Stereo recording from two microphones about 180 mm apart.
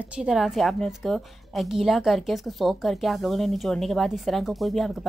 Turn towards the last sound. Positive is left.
turn(degrees=0)  # may be behind; listen again after turning